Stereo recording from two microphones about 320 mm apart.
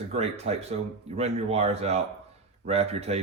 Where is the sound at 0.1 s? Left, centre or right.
Centre.